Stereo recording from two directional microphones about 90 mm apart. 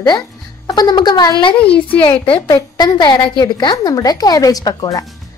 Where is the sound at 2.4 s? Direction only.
45° left (ahead or behind).